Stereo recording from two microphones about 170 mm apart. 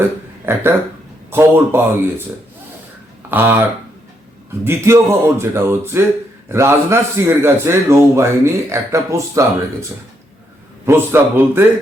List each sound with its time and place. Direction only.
0.5 s a man's voice: 15° right (ahead or behind)
3.2 s a man's voice: 10° right (ahead or behind)
10.8 s a man's voice: 15° right (ahead or behind)